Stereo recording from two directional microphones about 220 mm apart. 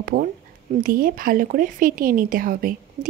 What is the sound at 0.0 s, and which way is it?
A woman's voice, 40° right (ahead or behind).